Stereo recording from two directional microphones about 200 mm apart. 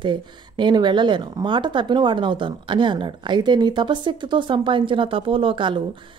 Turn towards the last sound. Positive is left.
turn(degrees=-25)  # may be behind; listen again after turning